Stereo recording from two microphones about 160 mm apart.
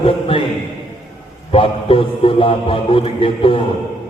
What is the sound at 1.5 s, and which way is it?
Music, 35° left (ahead or behind).